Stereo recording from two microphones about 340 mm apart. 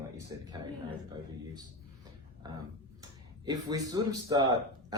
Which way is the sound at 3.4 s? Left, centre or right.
Centre.